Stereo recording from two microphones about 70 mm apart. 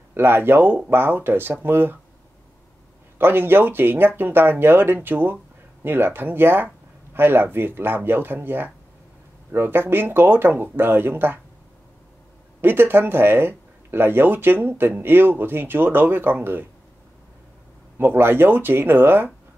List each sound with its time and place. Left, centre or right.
0.1 s speech: right
3.2 s speech: right
12.6 s speech: right
17.9 s speech: right